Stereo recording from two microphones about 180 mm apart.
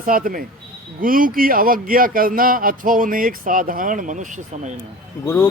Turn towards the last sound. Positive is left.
turn(degrees=15)  # may be behind; listen again after turning